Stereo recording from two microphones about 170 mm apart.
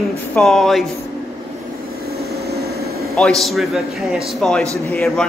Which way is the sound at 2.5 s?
65° right (ahead or behind).